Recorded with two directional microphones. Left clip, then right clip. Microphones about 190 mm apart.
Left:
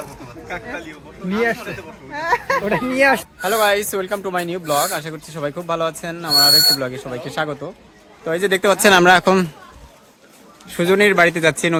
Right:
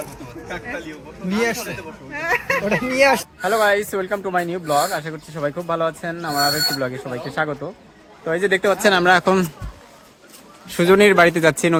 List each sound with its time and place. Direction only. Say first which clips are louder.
0.4 s speech: left 1 dB; 20° left (ahead or behind)
1.3 s speech: left 2 dB; 40° left (ahead or behind)
1.6 s speech: even; 15° left (ahead or behind)
2.6 s speech: even; 55° left (ahead or behind)
3.4 s speech: even; 10° left (ahead or behind)
8.2 s speech: even; 20° left (ahead or behind)
8.6 s speech: left 6 dB; 45° left (ahead or behind)
9.0 s speech: left 3 dB; 20° left (ahead or behind)
10.7 s speech: right 1 dB; 5° right (ahead or behind)